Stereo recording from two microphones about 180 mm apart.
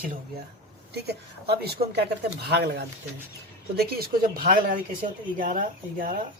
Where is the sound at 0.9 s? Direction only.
65° right (ahead or behind).